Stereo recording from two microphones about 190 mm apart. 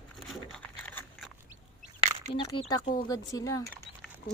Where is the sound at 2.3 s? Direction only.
25° left (ahead or behind).